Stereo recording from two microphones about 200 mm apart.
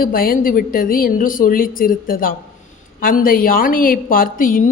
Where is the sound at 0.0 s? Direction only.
45° left (ahead or behind).